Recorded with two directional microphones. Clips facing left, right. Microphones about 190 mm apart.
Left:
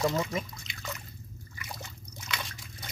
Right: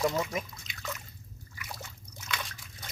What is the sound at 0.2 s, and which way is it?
Speech, 15° right (ahead or behind).